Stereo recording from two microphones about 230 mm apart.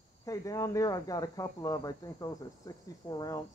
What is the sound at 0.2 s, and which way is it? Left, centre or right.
Speech, centre.